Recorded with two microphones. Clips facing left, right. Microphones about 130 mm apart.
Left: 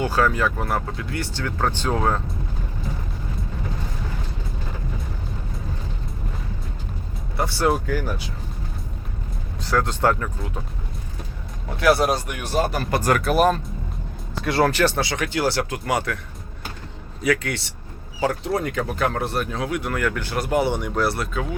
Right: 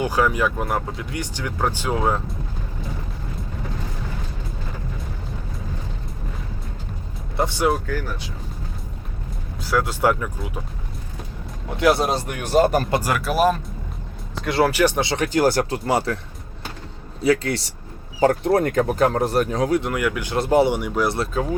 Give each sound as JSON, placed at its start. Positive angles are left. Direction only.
{"t": 0.0, "sound": "speech", "side_deg": -15}
{"t": 7.3, "sound": "speech", "side_deg": -20}
{"t": 7.7, "sound": "speech", "side_deg": 10}
{"t": 9.6, "sound": "speech", "side_deg": -10}
{"t": 11.8, "sound": "speech", "side_deg": -20}
{"t": 13.0, "sound": "speech", "side_deg": -5}
{"t": 14.7, "sound": "speech", "side_deg": -15}
{"t": 15.1, "sound": "speech", "side_deg": -40}
{"t": 15.7, "sound": "speech", "side_deg": -30}
{"t": 17.2, "sound": "speech", "side_deg": -30}
{"t": 18.2, "sound": "speech", "side_deg": -50}
{"t": 19.8, "sound": "speech", "side_deg": -15}
{"t": 20.3, "sound": "speech", "side_deg": -25}
{"t": 20.7, "sound": "speech", "side_deg": -10}